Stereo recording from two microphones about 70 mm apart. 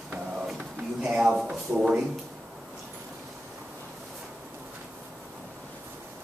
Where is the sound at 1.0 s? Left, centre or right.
Centre.